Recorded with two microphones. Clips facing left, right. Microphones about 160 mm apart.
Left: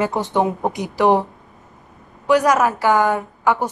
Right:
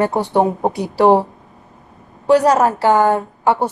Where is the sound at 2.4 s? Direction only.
30° right (ahead or behind).